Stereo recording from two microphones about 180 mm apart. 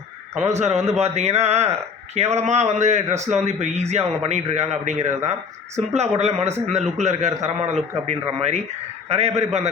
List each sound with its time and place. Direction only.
0.6 s a man's voice: 35° right (ahead or behind)